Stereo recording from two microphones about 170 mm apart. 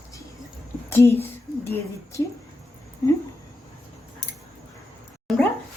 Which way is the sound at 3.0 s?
20° left (ahead or behind).